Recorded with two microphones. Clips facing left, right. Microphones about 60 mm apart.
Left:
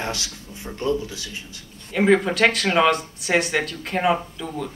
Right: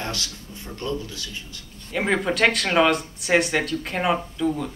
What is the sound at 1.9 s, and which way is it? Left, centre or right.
Speech, centre.